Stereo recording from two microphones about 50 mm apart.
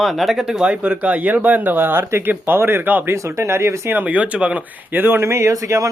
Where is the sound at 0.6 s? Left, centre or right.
Right.